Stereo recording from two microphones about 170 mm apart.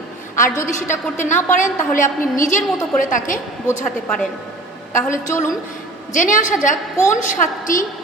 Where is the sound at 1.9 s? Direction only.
50° left (ahead or behind).